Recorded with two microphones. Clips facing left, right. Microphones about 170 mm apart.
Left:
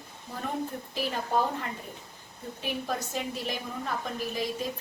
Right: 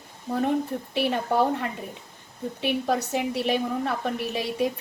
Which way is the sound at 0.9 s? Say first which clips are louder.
Right 7 dB; 70° right (ahead or behind).